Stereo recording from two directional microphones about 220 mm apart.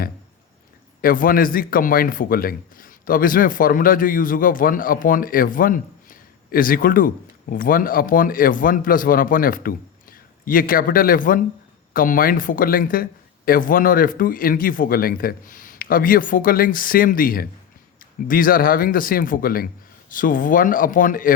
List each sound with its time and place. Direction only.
1.0 s speech: 40° left (ahead or behind)